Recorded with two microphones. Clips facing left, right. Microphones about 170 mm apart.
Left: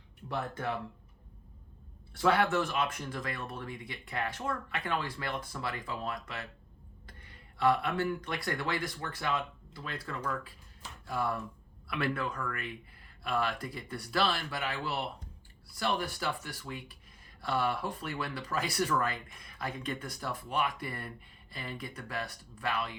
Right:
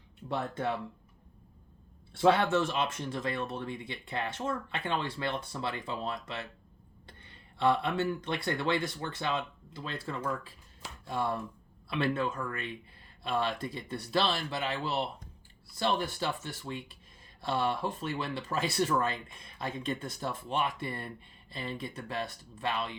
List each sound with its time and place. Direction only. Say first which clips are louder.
0.3 s speech: right 3 dB; 25° right (ahead or behind)
2.1 s speech: right 2 dB; 25° right (ahead or behind)